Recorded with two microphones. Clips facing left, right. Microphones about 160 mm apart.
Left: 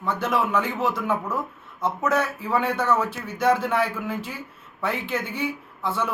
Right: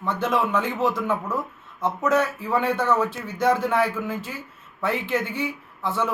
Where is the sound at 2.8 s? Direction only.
15° right (ahead or behind).